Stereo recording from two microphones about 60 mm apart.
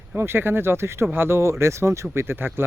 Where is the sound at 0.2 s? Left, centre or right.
Right.